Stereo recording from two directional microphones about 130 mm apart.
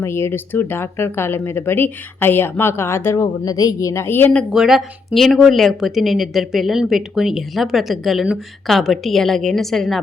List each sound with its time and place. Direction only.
0.0 s speech: 20° left (ahead or behind)
4.5 s speech: 5° right (ahead or behind)